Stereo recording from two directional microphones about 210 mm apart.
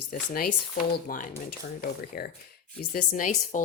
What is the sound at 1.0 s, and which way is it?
A woman's voice, 40° left (ahead or behind).